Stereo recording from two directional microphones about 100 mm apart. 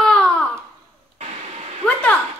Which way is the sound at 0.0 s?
5° left (ahead or behind).